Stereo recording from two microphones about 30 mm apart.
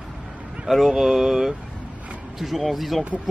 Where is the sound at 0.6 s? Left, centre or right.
Centre.